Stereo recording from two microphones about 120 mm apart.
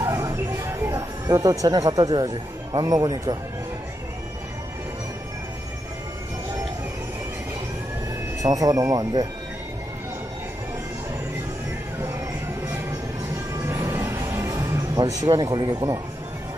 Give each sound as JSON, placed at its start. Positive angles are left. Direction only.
{"t": 0.0, "sound": "music", "side_deg": -30}
{"t": 1.2, "sound": "speech", "side_deg": -30}
{"t": 8.4, "sound": "speech", "side_deg": -30}
{"t": 13.9, "sound": "music", "side_deg": -25}